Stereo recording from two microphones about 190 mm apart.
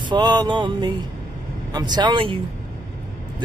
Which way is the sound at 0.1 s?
25° right (ahead or behind).